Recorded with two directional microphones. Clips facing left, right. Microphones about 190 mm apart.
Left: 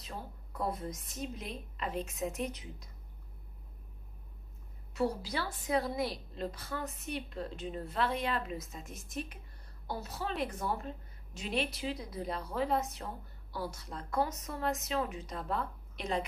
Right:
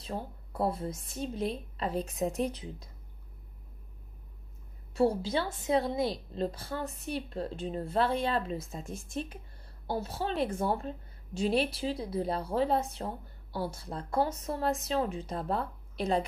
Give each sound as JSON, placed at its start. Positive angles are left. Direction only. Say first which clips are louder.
{"t": 0.0, "sound": "speech", "louder": "right 7 dB", "side_deg": -30}
{"t": 4.9, "sound": "a woman's voice", "louder": "right 6 dB", "side_deg": -25}